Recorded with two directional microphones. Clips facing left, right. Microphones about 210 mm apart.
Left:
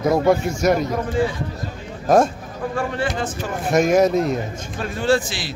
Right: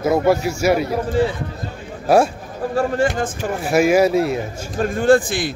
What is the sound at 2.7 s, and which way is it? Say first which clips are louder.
Speech: right 6 dB; 45° right (ahead or behind).